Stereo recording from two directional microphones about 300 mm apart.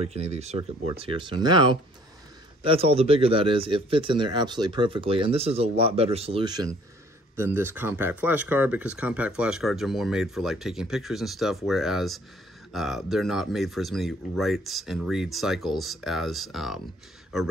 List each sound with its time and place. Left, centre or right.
0.0 s speech: right; by 16.8 s centre